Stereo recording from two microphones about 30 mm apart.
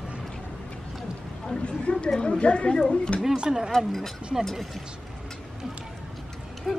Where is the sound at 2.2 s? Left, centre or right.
Left.